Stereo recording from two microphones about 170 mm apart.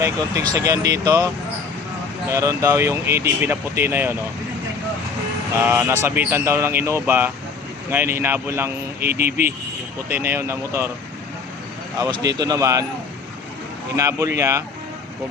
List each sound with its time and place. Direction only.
0.5 s a man's voice: 20° right (ahead or behind)
2.3 s speech: 20° right (ahead or behind)
5.6 s speech: 10° right (ahead or behind)
11.9 s a man's voice: 20° right (ahead or behind)
13.9 s speech: 20° right (ahead or behind)